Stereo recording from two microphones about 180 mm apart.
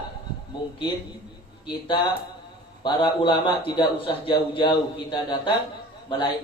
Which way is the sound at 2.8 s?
25° left (ahead or behind).